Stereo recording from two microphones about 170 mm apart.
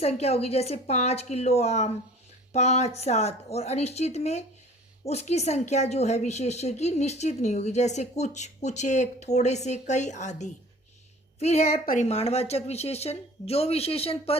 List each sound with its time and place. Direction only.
0.0 s a woman's voice: 40° left (ahead or behind)